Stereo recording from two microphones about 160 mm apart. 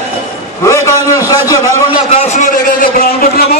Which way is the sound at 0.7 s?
20° left (ahead or behind).